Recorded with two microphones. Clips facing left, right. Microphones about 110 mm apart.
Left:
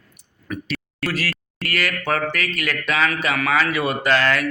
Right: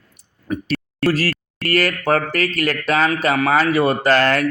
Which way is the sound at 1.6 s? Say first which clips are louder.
Right 6 dB; 40° right (ahead or behind).